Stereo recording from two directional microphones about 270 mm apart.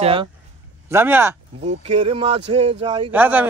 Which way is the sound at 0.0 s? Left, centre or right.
Centre.